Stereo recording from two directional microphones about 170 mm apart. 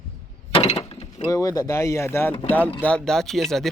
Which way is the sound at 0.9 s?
35° left (ahead or behind).